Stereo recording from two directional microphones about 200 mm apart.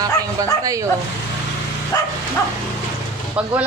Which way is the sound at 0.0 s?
15° right (ahead or behind).